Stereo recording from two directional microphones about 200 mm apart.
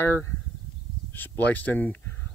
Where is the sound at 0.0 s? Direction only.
10° left (ahead or behind).